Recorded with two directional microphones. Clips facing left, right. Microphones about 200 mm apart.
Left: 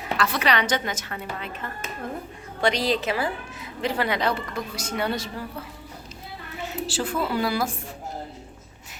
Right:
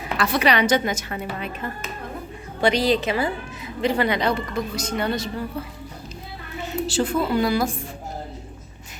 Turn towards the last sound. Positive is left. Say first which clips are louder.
# right 4 dB
turn(degrees=5)  # may be behind; listen again after turning